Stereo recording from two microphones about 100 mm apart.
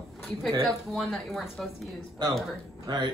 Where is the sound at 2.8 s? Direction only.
45° right (ahead or behind).